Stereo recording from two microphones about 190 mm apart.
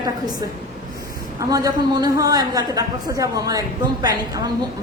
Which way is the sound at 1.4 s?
20° right (ahead or behind).